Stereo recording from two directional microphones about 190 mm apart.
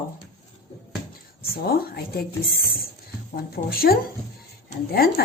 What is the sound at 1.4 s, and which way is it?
Speech, 55° left (ahead or behind).